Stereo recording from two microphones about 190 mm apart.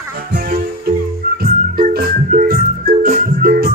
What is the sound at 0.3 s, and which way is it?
Music, 55° right (ahead or behind).